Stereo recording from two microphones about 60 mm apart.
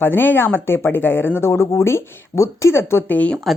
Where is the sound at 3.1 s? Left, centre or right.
Left.